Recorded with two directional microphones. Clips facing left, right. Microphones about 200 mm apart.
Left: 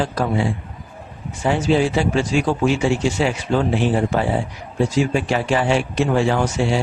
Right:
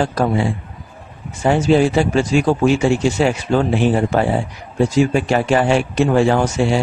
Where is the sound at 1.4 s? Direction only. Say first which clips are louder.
Right 4 dB; 45° right (ahead or behind).